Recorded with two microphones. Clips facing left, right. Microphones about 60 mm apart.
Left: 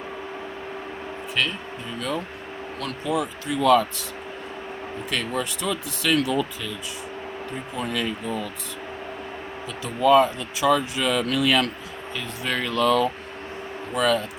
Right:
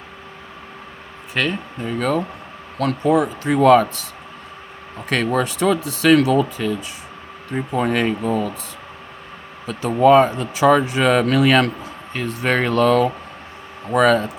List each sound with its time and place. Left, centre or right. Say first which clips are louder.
1.4 s speech: right 5 dB; right
5.0 s speech: right 8 dB; right
9.6 s speech: right 6 dB; right
13.9 s speech: right 7 dB; right